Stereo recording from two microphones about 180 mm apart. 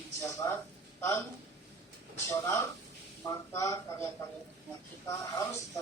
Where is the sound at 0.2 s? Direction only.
15° left (ahead or behind).